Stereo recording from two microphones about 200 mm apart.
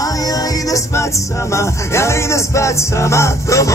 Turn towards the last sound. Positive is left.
turn(degrees=15)  # may be behind; listen again after turning